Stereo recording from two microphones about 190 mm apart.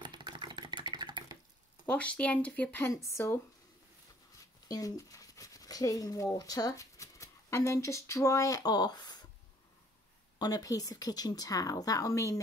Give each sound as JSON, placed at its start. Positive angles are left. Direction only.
{"t": 0.0, "sound": "a sound", "side_deg": -25}
{"t": 1.9, "sound": "speech", "side_deg": 5}
{"t": 4.6, "sound": "speech", "side_deg": 20}
{"t": 10.4, "sound": "a woman's voice", "side_deg": 20}